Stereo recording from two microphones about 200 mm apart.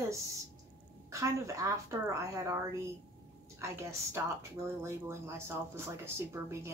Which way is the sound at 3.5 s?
15° right (ahead or behind).